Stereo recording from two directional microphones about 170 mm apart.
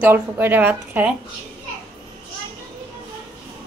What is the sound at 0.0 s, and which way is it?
A woman's voice, 10° right (ahead or behind).